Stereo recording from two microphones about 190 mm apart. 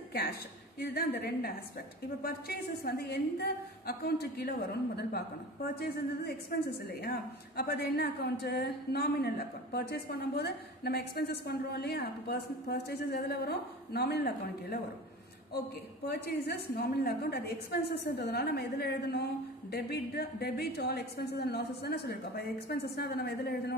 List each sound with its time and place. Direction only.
0.7 s a woman's voice: 55° left (ahead or behind)
6.9 s a woman's voice: 55° left (ahead or behind)
16.1 s a woman's voice: 55° left (ahead or behind)